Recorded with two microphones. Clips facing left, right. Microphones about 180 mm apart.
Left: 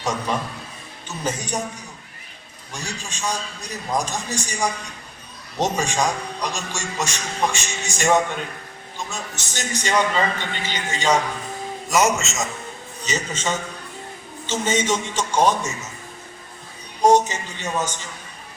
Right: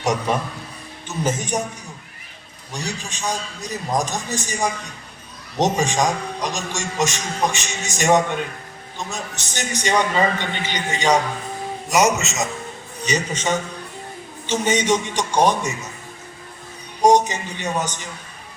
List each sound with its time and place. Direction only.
0.0 s a man's voice: 20° right (ahead or behind)
2.7 s a man's voice: 20° right (ahead or behind)
17.0 s a man's voice: 15° right (ahead or behind)